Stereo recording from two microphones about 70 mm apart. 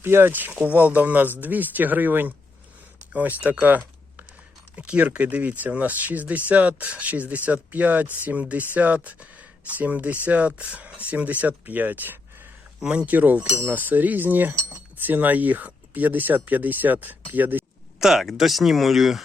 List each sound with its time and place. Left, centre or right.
0.0 s speech: right
12.8 s speech: centre
18.0 s speech: centre